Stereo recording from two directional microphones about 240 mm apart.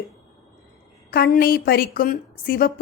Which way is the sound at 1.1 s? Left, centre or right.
Left.